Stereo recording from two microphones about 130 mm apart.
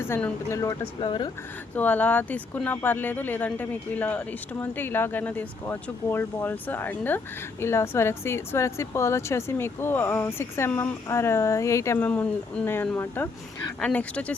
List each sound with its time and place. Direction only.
0.0 s speech: 20° left (ahead or behind)
0.9 s speech: 40° left (ahead or behind)
1.7 s speech: 10° left (ahead or behind)